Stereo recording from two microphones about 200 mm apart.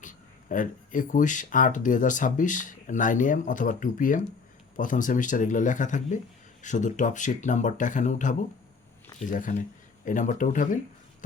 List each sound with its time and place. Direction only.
0.0 s speech: 40° left (ahead or behind)